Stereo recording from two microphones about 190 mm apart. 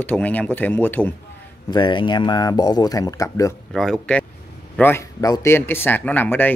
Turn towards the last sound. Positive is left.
turn(degrees=10)  # may be behind; listen again after turning